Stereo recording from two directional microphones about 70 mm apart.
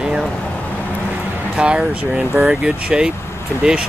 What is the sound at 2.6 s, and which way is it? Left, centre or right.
Speech, centre.